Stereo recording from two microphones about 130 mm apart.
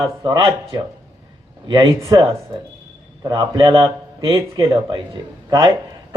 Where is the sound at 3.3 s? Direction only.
35° right (ahead or behind).